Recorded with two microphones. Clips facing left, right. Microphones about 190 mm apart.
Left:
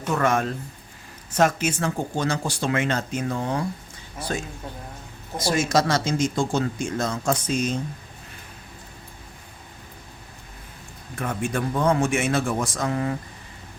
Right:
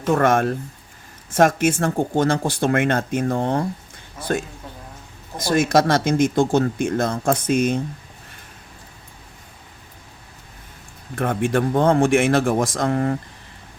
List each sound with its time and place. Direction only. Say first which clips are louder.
0.1 s speech: right 5 dB; 50° right (ahead or behind)
5.5 s speech: right 5 dB; 55° right (ahead or behind)
11.1 s speech: right 7 dB; 55° right (ahead or behind)